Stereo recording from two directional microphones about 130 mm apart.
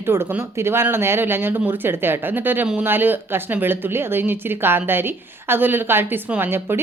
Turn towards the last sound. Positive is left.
turn(degrees=-15)  # may be behind; listen again after turning